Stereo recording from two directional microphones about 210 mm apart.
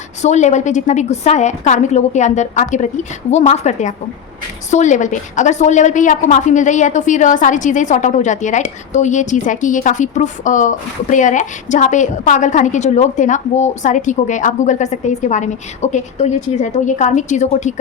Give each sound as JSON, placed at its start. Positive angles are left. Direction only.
{"t": 0.2, "sound": "a woman's voice", "side_deg": 35}